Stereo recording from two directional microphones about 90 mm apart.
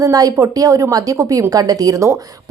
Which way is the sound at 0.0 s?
40° right (ahead or behind).